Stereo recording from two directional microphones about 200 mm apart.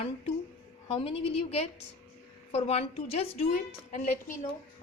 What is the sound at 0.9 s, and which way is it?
A woman's voice, 30° left (ahead or behind).